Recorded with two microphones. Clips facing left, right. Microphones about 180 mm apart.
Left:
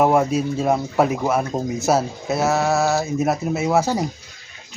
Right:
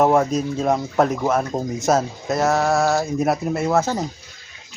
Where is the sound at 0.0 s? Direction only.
5° left (ahead or behind).